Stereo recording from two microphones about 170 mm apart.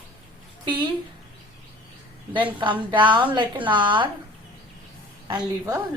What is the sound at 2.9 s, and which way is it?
A woman's voice, 30° right (ahead or behind).